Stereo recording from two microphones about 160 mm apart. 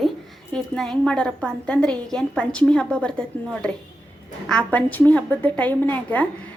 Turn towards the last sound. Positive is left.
turn(degrees=10)  # may be behind; listen again after turning